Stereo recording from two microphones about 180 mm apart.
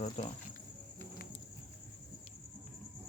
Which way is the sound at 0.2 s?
35° left (ahead or behind).